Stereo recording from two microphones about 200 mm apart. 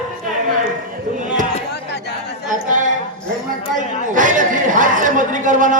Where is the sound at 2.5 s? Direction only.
40° right (ahead or behind).